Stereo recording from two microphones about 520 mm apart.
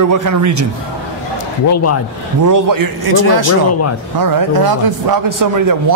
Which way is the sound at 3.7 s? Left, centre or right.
Left.